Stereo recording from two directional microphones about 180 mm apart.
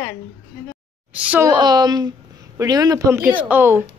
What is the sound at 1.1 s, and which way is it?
Speech, 10° right (ahead or behind).